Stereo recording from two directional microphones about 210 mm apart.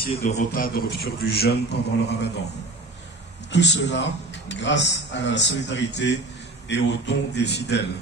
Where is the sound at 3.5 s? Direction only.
55° left (ahead or behind).